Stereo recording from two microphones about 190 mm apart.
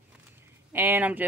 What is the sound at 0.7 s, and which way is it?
Speech, 10° right (ahead or behind).